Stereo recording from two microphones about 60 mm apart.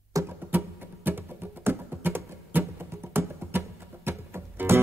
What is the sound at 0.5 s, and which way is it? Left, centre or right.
Music, right.